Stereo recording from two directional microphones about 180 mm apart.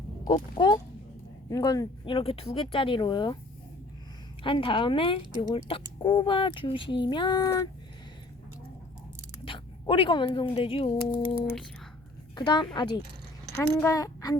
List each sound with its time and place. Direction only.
0.3 s speech: 30° left (ahead or behind)
4.4 s speech: 30° left (ahead or behind)
9.4 s speech: 30° left (ahead or behind)
12.4 s a woman's voice: 25° left (ahead or behind)